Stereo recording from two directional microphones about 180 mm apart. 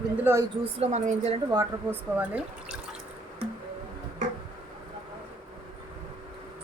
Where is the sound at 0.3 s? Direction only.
15° right (ahead or behind).